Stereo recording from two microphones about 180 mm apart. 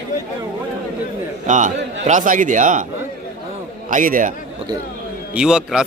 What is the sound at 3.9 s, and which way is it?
Speech, 50° right (ahead or behind).